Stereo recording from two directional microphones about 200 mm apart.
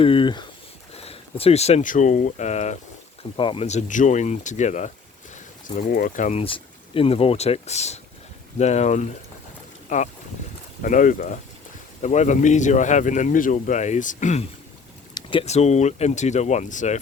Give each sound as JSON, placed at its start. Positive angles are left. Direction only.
{"t": 0.0, "sound": "speech", "side_deg": 25}
{"t": 15.1, "sound": "speech", "side_deg": 25}